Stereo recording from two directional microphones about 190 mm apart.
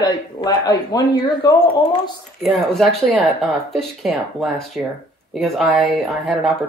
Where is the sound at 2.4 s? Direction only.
Centre (ahead or behind).